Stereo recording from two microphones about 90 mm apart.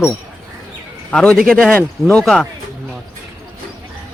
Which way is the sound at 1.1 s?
10° left (ahead or behind).